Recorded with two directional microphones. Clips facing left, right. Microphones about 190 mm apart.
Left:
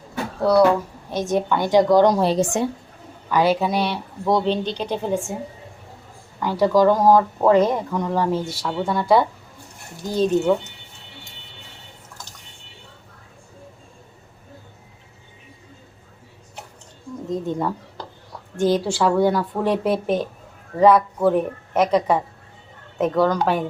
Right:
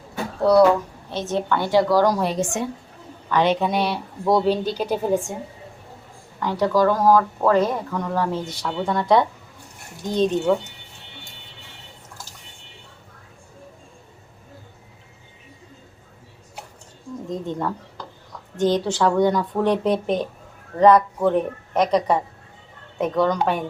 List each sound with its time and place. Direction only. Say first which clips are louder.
0.4 s speech: right 1 dB; centre (ahead or behind)
1.1 s a woman's voice: left 2 dB; 15° left (ahead or behind); by 2.6 s 35° left (ahead or behind)
3.2 s speech: left 1 dB; 10° left (ahead or behind)
6.4 s speech: left 3 dB; 10° left (ahead or behind)
17.4 s speech: left 2 dB; 10° left (ahead or behind)